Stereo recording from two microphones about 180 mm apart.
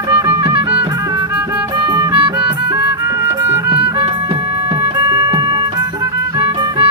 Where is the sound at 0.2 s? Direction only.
20° right (ahead or behind).